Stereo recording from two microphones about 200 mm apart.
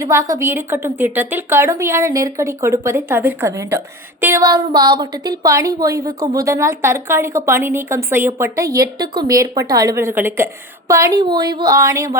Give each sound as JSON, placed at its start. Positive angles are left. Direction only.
{"t": 0.0, "sound": "a woman's voice", "side_deg": -15}